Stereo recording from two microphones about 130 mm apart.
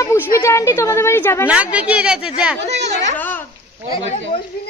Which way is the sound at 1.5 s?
10° right (ahead or behind).